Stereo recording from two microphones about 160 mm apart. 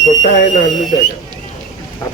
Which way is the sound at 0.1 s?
50° left (ahead or behind).